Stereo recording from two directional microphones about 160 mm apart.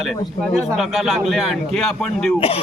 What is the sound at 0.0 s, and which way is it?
A man's voice, centre (ahead or behind).